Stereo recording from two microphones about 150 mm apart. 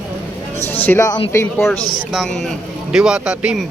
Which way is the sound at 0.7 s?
15° left (ahead or behind).